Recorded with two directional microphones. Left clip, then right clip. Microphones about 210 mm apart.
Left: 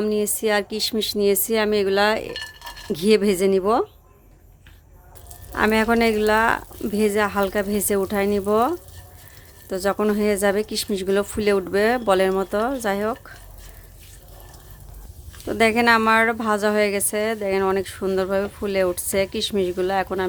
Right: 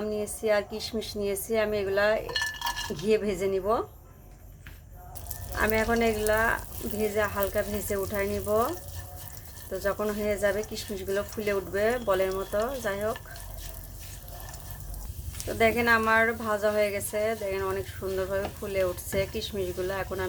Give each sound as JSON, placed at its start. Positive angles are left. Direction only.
{"t": 0.0, "sound": "a woman's voice", "side_deg": 50}
{"t": 5.5, "sound": "speech", "side_deg": 55}
{"t": 15.4, "sound": "speech", "side_deg": 60}